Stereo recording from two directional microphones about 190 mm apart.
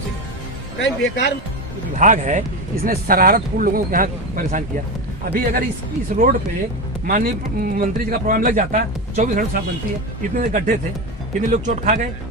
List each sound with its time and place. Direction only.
0.8 s speech: 70° left (ahead or behind)
2.0 s speech: 40° right (ahead or behind)